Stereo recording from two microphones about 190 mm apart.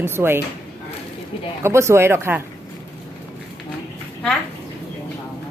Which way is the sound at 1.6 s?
15° right (ahead or behind).